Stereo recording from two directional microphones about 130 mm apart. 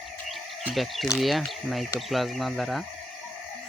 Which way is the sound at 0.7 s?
Centre (ahead or behind).